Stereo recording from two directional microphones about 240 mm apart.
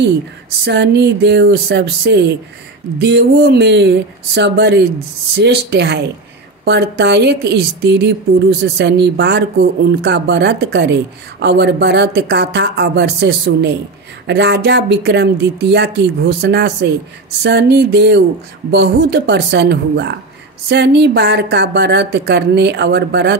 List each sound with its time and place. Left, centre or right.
0.7 s a woman's voice: right